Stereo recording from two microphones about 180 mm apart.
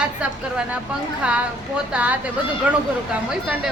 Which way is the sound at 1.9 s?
10° right (ahead or behind).